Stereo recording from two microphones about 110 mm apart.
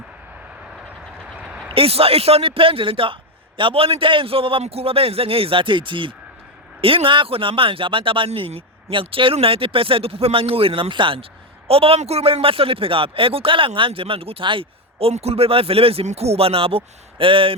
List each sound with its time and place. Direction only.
1.3 s a sound: 10° right (ahead or behind)
1.7 s speech: 60° right (ahead or behind)
8.3 s speech: 65° right (ahead or behind)